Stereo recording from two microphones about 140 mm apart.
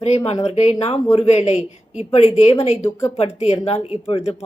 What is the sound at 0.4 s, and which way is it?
Speech, 50° left (ahead or behind).